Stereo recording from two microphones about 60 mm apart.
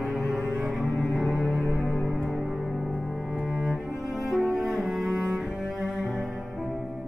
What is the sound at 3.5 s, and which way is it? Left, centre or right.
Cello, centre.